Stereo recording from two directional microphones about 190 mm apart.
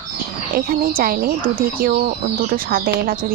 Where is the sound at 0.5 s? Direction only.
50° right (ahead or behind).